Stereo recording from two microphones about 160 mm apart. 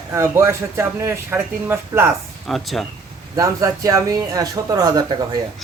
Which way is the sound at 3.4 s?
20° right (ahead or behind).